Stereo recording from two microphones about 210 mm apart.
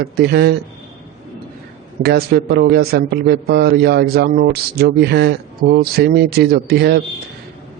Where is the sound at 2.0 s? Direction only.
50° right (ahead or behind).